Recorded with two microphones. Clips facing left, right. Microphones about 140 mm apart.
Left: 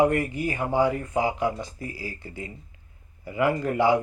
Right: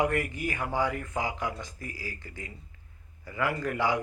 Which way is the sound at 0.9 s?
30° left (ahead or behind).